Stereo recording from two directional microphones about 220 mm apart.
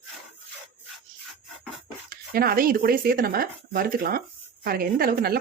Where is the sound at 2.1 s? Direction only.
40° right (ahead or behind).